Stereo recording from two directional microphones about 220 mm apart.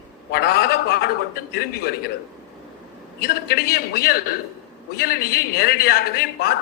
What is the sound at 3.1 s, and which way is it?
Speech, 45° left (ahead or behind).